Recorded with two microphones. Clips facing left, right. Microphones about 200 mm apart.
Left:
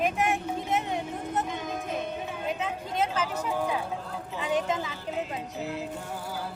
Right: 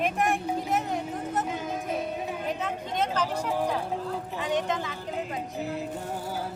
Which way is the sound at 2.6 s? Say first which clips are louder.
Even; 5° left (ahead or behind).